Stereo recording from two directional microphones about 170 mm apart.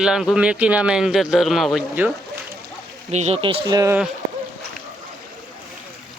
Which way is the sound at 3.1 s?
40° right (ahead or behind).